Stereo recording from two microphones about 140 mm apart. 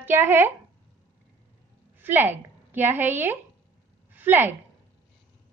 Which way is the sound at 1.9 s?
15° right (ahead or behind).